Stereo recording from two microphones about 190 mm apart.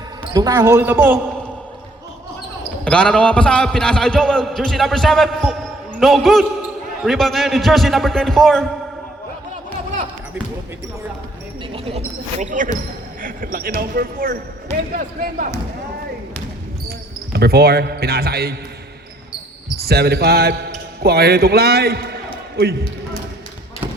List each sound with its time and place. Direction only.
0.3 s speech: 20° right (ahead or behind)
2.8 s a man's voice: 5° left (ahead or behind)
11.7 s basketball bounce: 30° right (ahead or behind); by 13.7 s 45° right (ahead or behind)
13.7 s speech: 50° right (ahead or behind)
17.3 s speech: 55° right (ahead or behind)
19.7 s speech: 55° right (ahead or behind)